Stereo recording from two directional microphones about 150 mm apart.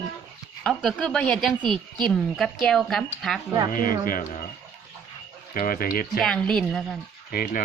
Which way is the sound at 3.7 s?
70° left (ahead or behind).